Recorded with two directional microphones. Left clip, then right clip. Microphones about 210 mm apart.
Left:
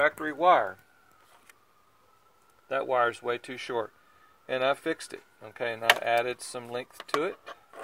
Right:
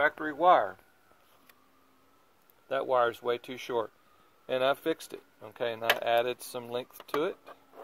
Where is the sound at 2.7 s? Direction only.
10° right (ahead or behind).